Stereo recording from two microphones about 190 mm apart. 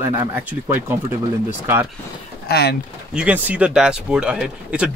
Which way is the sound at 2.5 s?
55° left (ahead or behind).